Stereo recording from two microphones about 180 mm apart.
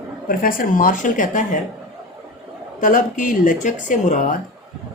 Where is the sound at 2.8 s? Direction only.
45° left (ahead or behind).